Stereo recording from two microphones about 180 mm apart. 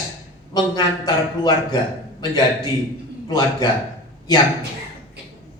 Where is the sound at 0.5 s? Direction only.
20° left (ahead or behind).